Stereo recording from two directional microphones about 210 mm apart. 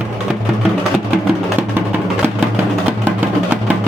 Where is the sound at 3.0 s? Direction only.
10° right (ahead or behind).